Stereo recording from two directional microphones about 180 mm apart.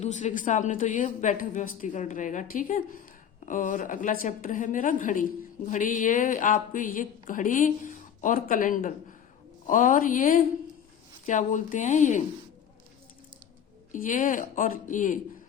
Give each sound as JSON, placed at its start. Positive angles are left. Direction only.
{"t": 0.0, "sound": "a woman's voice", "side_deg": 40}
{"t": 13.9, "sound": "a woman's voice", "side_deg": 45}